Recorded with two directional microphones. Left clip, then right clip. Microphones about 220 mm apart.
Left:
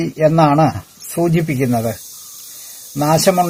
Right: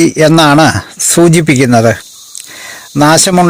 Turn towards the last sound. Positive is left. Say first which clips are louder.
# right 7 dB
turn(degrees=-45)  # may be behind; listen again after turning